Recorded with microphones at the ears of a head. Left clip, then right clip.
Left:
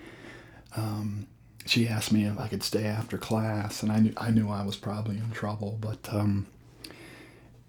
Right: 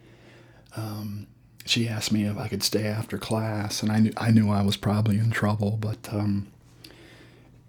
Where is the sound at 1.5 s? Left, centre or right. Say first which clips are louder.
Right 1 dB; centre.